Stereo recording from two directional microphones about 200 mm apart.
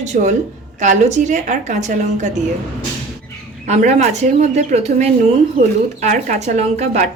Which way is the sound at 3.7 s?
35° right (ahead or behind).